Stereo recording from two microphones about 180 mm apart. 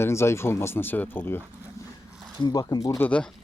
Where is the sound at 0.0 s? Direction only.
15° left (ahead or behind).